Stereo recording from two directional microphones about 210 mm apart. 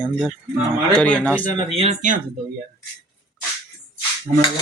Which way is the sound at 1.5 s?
30° right (ahead or behind).